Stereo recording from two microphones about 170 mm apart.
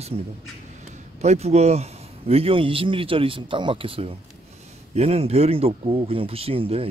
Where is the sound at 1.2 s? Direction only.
40° right (ahead or behind).